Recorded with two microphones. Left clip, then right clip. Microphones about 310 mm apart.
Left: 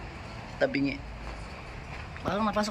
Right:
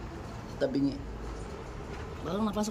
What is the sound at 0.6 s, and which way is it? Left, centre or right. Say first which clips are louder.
Speech: left 2 dB; centre.